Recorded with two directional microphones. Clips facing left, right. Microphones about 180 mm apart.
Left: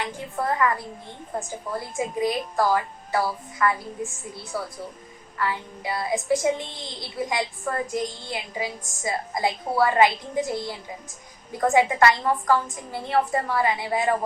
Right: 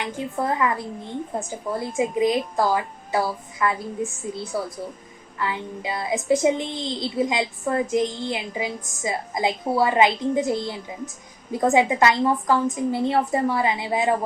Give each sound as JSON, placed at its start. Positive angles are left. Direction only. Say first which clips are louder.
{"t": 0.0, "sound": "a woman's voice", "louder": "right 2 dB", "side_deg": -20}
{"t": 2.0, "sound": "a woman's voice", "louder": "right 4 dB", "side_deg": -20}